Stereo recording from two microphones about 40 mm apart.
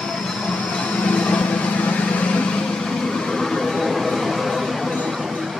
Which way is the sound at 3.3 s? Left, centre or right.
Centre.